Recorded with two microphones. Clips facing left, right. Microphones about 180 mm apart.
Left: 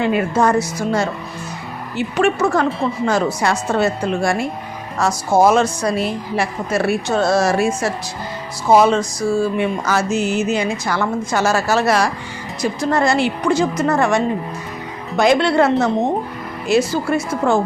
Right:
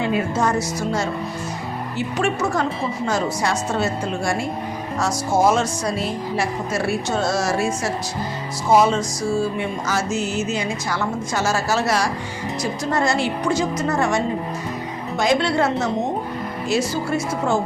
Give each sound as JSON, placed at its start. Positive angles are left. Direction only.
{"t": 0.0, "sound": "music", "side_deg": 60}
{"t": 2.1, "sound": "music", "side_deg": 60}
{"t": 8.8, "sound": "music", "side_deg": 65}
{"t": 15.2, "sound": "music", "side_deg": 65}